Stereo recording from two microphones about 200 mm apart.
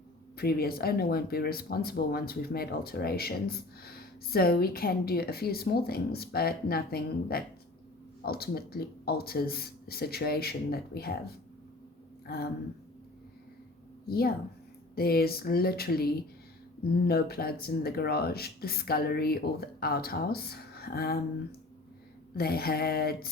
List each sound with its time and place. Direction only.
0.3 s speech: 50° left (ahead or behind)
12.2 s a sound: 50° left (ahead or behind)
14.1 s speech: 50° left (ahead or behind)
22.4 s speech: 50° left (ahead or behind)